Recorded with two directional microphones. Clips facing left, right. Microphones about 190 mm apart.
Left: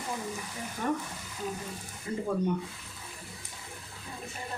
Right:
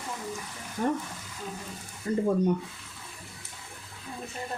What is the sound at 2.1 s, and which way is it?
Speech, 45° right (ahead or behind).